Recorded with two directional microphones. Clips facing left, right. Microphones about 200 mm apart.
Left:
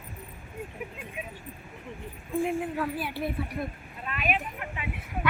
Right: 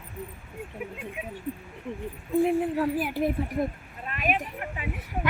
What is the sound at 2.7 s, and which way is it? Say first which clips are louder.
Speech: right 5 dB; 35° right (ahead or behind).